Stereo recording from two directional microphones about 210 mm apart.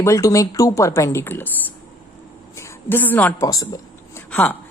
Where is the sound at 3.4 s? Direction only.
15° left (ahead or behind).